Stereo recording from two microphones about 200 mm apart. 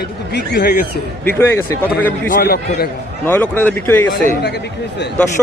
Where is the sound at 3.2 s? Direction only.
10° left (ahead or behind).